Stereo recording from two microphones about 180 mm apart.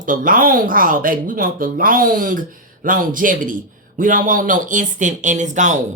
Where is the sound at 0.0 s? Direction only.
50° right (ahead or behind).